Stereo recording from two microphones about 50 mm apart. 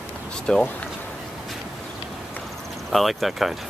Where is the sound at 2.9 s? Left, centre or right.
Centre.